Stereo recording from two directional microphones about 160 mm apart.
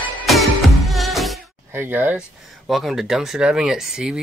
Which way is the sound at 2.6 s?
Centre (ahead or behind).